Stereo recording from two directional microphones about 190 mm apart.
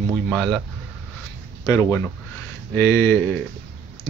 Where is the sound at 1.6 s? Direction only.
15° left (ahead or behind).